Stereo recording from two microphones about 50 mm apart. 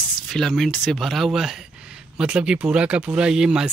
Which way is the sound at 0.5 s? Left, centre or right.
Centre.